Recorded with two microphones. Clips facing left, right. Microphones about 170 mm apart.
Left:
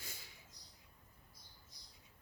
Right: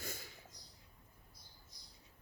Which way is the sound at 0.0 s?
50° right (ahead or behind).